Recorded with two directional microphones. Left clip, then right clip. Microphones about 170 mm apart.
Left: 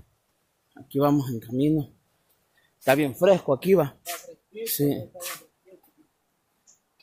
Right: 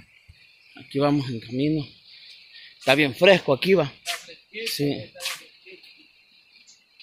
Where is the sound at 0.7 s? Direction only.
Centre (ahead or behind).